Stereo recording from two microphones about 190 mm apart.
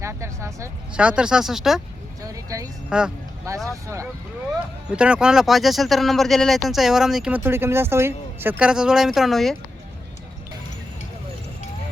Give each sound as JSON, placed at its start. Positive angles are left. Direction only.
{"t": 0.0, "sound": "speech", "side_deg": -15}
{"t": 2.2, "sound": "a sound", "side_deg": -20}
{"t": 2.9, "sound": "speech", "side_deg": -5}
{"t": 3.5, "sound": "speech", "side_deg": -15}
{"t": 4.9, "sound": "speech", "side_deg": -5}